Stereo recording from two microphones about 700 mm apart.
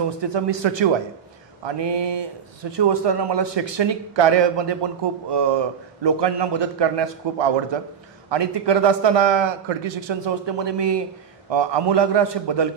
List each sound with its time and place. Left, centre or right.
0.2 s speech: right